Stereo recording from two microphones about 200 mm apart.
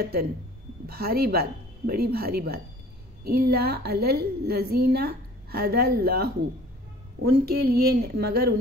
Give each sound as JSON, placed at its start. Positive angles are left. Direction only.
{"t": 0.0, "sound": "a woman's voice", "side_deg": -50}